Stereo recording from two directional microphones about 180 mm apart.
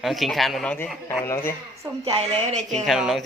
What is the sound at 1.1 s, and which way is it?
Speech, 15° left (ahead or behind).